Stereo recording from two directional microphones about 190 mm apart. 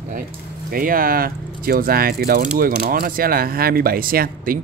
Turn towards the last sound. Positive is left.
turn(degrees=-50)  # may be behind; listen again after turning